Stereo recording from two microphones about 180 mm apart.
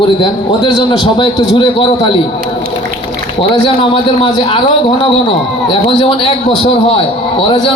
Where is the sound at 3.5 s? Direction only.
30° left (ahead or behind).